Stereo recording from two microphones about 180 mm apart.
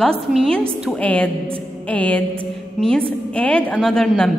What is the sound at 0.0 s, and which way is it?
A woman's voice, centre (ahead or behind).